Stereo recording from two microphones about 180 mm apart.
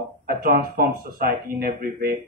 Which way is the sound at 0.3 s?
55° right (ahead or behind).